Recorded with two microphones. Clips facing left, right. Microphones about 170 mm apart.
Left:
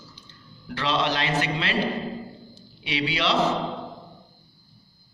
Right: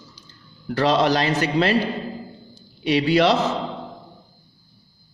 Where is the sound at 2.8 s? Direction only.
45° right (ahead or behind).